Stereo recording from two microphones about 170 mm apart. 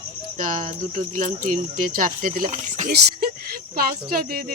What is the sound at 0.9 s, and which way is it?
Speech, 45° right (ahead or behind).